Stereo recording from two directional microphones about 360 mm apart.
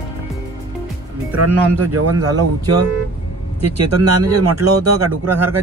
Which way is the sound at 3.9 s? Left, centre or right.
Right.